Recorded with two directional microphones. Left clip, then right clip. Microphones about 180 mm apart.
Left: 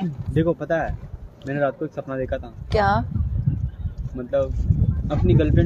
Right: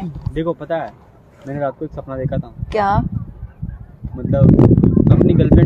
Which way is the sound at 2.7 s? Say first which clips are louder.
Right 3 dB; 15° right (ahead or behind).